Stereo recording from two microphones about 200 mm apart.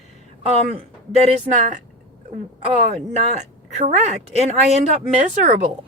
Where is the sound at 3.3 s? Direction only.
35° right (ahead or behind).